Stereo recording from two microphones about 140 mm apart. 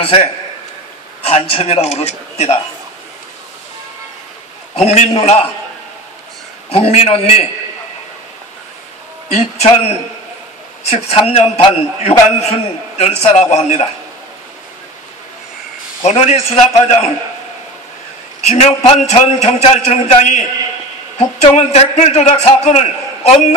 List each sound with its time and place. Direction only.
0.0 s a man's voice: 45° left (ahead or behind)
4.7 s a man's voice: 50° left (ahead or behind)
6.7 s a man's voice: 50° left (ahead or behind)
9.3 s a man's voice: 50° left (ahead or behind)
10.8 s a man's voice: 45° left (ahead or behind)
16.0 s a man's voice: 50° left (ahead or behind)
18.5 s a man's voice: 50° left (ahead or behind)